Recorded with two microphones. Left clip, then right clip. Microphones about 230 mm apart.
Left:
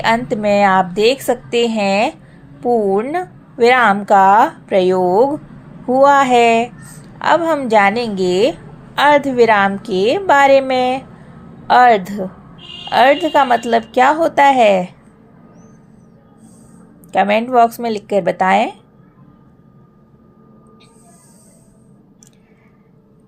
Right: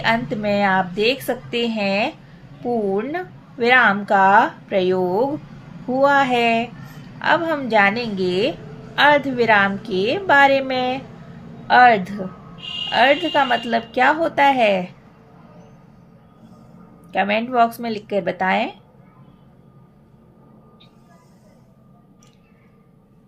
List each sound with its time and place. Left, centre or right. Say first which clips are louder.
0.0 s a woman's voice: left 5 dB; left
17.1 s a woman's voice: left 6 dB; left